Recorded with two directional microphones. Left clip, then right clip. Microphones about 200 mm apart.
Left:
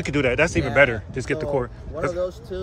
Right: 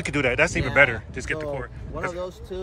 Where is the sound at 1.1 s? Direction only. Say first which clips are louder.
Left 5 dB; 20° left (ahead or behind).